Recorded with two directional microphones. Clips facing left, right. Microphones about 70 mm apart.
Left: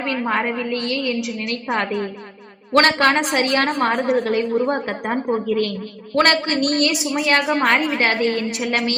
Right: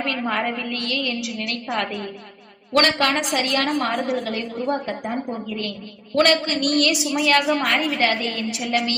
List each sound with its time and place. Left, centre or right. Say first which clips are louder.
0.0 s a woman's voice: left 2 dB; left
6.1 s a woman's voice: left 1 dB; left